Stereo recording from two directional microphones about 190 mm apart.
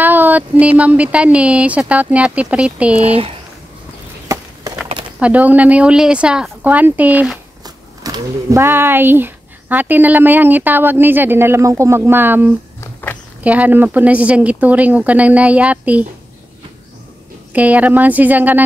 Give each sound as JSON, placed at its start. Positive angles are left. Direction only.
{"t": 0.0, "sound": "speech", "side_deg": -10}
{"t": 3.0, "sound": "speech", "side_deg": -30}
{"t": 5.2, "sound": "speech", "side_deg": -10}
{"t": 7.6, "sound": "speech", "side_deg": -20}
{"t": 12.8, "sound": "a sound", "side_deg": 10}
{"t": 13.4, "sound": "speech", "side_deg": -10}
{"t": 17.5, "sound": "speech", "side_deg": -10}